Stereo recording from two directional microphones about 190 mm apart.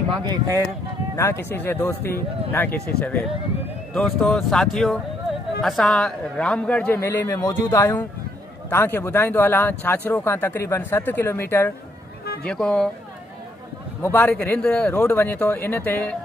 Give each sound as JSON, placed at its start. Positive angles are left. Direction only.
{"t": 0.2, "sound": "speech", "side_deg": -20}
{"t": 1.1, "sound": "a man's voice", "side_deg": 15}
{"t": 14.0, "sound": "speech", "side_deg": 10}